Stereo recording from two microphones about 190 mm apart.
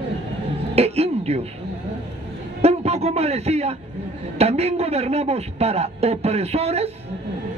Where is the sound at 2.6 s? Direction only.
35° right (ahead or behind).